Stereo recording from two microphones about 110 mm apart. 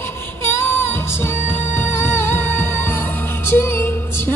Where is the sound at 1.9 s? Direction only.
20° left (ahead or behind).